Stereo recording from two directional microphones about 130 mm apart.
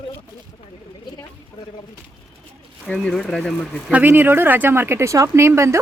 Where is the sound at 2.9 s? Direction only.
5° left (ahead or behind).